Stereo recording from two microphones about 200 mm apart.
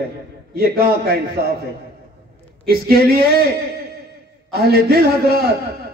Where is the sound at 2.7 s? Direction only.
50° right (ahead or behind).